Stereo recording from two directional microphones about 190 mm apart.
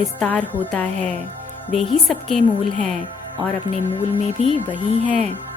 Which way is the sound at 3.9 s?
30° left (ahead or behind).